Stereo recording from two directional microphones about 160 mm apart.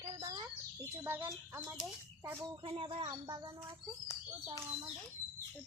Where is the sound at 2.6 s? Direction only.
35° right (ahead or behind).